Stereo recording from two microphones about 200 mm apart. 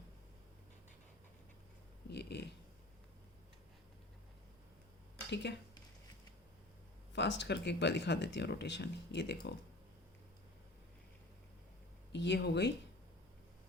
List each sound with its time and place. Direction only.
2.0 s speech: 55° left (ahead or behind)
5.3 s speech: 60° left (ahead or behind)
7.1 s speech: 60° left (ahead or behind)
12.1 s speech: 60° left (ahead or behind)